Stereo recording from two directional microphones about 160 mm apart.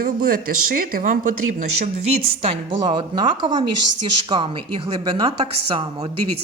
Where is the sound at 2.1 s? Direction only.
35° right (ahead or behind).